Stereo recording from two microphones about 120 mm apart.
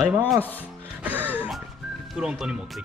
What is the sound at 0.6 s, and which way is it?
Music, 15° right (ahead or behind).